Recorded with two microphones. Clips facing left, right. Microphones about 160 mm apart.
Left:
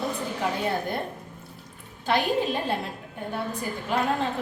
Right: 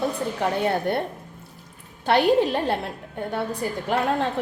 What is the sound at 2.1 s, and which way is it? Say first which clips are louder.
Speech: right 6 dB; 70° right (ahead or behind).